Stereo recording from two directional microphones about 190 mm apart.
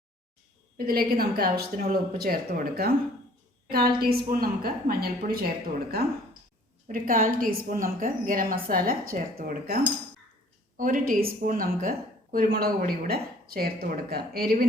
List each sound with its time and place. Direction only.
0.9 s a woman's voice: 50° right (ahead or behind)
6.8 s a woman's voice: 50° right (ahead or behind)